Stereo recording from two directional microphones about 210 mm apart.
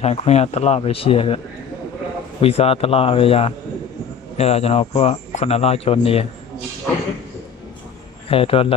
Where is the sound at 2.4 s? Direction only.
30° left (ahead or behind).